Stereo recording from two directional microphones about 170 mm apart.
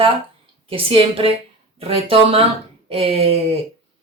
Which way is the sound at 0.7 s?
35° right (ahead or behind).